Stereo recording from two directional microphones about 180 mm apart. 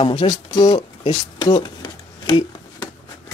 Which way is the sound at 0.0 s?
25° left (ahead or behind).